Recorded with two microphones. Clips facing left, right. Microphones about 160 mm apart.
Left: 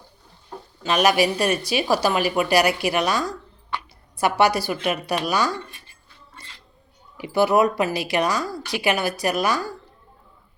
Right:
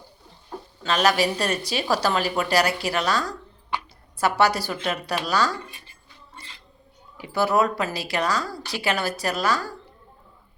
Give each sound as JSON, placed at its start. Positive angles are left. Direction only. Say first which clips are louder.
{"t": 0.9, "sound": "speech", "louder": "left 2 dB", "side_deg": 15}
{"t": 7.2, "sound": "speech", "louder": "left 3 dB", "side_deg": 15}